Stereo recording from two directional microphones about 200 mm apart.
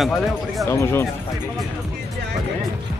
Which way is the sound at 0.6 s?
10° left (ahead or behind).